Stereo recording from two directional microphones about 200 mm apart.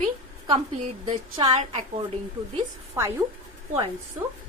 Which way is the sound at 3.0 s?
15° right (ahead or behind).